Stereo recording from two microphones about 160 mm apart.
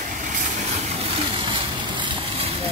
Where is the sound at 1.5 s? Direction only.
30° right (ahead or behind).